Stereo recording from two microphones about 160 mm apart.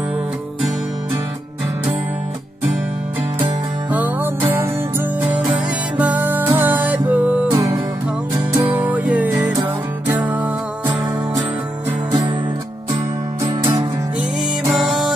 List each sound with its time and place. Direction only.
3.9 s music: 10° right (ahead or behind)
7.5 s music: 20° right (ahead or behind)
8.6 s music: 10° right (ahead or behind)
13.4 s music: 25° right (ahead or behind)
14.7 s music: centre (ahead or behind)